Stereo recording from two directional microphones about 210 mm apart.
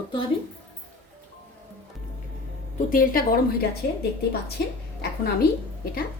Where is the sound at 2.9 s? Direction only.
45° left (ahead or behind).